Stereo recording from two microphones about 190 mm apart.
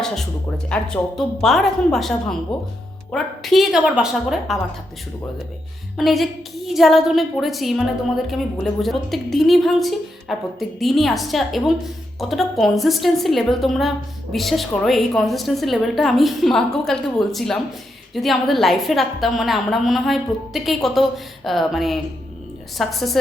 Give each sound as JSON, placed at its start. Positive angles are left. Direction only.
{"t": 0.0, "sound": "a woman's voice", "side_deg": 0}
{"t": 6.0, "sound": "a woman's voice", "side_deg": 0}